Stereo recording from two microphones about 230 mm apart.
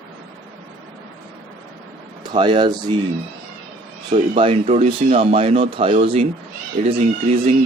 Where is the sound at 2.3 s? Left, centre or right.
Centre.